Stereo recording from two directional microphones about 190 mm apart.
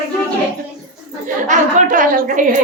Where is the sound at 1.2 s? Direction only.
40° right (ahead or behind).